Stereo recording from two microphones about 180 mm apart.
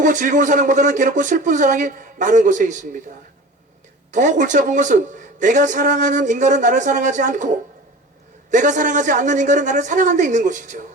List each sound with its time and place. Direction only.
0.0 s a man's voice: 45° right (ahead or behind)
4.1 s a man's voice: 45° right (ahead or behind)